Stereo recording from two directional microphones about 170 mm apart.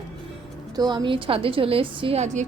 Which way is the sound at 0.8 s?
25° right (ahead or behind).